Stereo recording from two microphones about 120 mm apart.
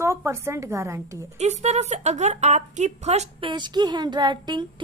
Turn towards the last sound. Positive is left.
turn(degrees=-40)  # may be behind; listen again after turning